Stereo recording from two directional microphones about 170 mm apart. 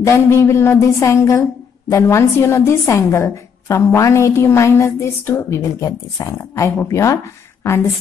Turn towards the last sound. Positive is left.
turn(degrees=15)  # may be behind; listen again after turning